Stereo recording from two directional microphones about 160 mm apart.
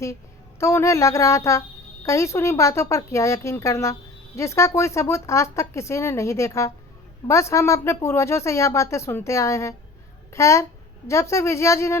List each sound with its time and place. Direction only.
0.6 s a woman's voice: 20° left (ahead or behind)